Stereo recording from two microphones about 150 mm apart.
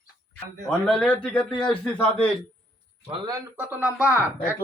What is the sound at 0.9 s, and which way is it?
A man's voice, 5° left (ahead or behind).